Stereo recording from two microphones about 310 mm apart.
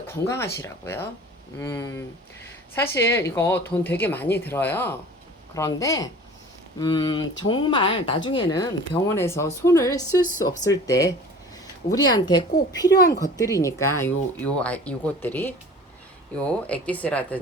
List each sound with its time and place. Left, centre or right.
0.1 s speech: centre